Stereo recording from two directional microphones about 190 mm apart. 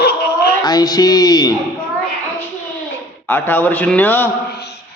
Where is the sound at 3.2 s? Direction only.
10° left (ahead or behind).